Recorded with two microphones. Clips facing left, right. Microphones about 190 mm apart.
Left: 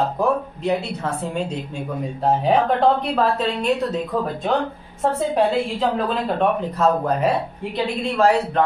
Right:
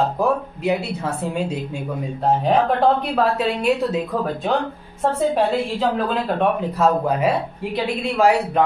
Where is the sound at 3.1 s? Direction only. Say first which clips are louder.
Right 1 dB; 10° right (ahead or behind).